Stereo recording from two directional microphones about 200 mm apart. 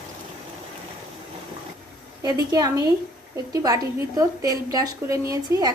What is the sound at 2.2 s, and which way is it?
A woman's voice, 20° right (ahead or behind).